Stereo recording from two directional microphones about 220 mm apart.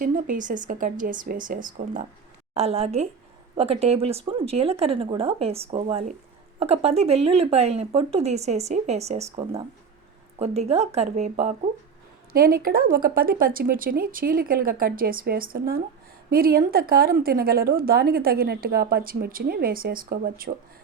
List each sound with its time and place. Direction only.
0.0 s speech: 35° right (ahead or behind)
12.3 s a woman's voice: 40° right (ahead or behind)